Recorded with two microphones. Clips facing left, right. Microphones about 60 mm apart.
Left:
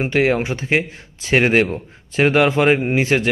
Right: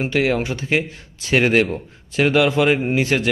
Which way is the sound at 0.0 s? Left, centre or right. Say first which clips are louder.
Left 2 dB; left.